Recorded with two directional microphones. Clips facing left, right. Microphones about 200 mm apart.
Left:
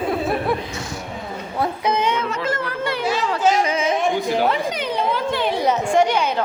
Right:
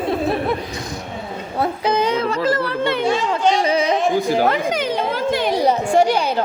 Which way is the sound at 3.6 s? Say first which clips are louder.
Right 2 dB; 35° right (ahead or behind).